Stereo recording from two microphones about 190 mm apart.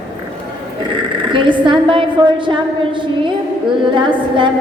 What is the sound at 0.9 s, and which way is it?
A woman's voice, 25° right (ahead or behind).